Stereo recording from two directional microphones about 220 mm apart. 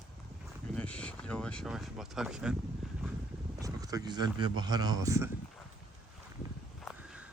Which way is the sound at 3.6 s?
15° right (ahead or behind).